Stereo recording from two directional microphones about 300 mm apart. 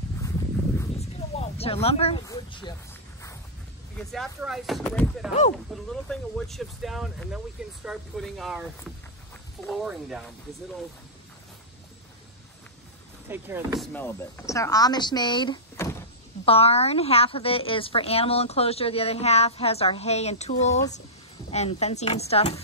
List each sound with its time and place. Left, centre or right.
0.9 s a sound: left
4.1 s speech: centre
9.7 s speech: centre
13.3 s speech: centre
13.9 s a woman's voice: centre